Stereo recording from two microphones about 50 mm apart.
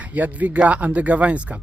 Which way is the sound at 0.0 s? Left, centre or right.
Right.